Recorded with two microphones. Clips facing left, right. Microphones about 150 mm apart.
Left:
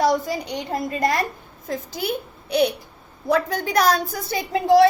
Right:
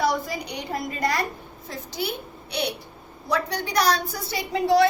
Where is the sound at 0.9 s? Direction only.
45° left (ahead or behind).